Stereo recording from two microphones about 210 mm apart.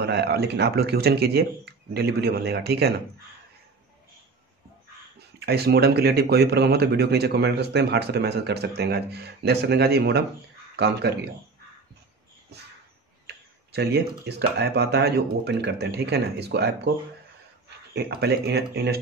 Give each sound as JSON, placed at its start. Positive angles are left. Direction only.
{"t": 0.0, "sound": "speech", "side_deg": -50}
{"t": 5.4, "sound": "speech", "side_deg": -50}
{"t": 12.5, "sound": "a sound", "side_deg": -50}
{"t": 13.7, "sound": "speech", "side_deg": -50}